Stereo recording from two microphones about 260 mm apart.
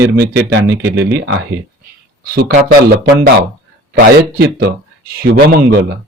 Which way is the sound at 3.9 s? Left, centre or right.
Right.